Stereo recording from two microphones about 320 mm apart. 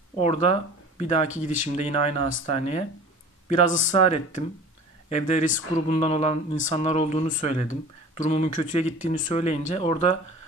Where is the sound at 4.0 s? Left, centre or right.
Centre.